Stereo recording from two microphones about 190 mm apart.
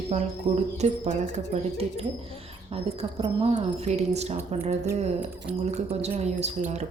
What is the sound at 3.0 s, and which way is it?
Speech, 25° right (ahead or behind).